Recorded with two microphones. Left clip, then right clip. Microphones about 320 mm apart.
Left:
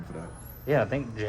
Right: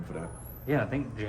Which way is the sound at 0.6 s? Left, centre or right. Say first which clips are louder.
Left 4 dB; left.